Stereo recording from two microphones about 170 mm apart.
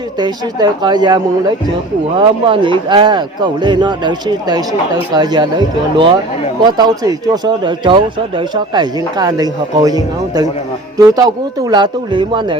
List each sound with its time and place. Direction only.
0.2 s a man's voice: 25° right (ahead or behind)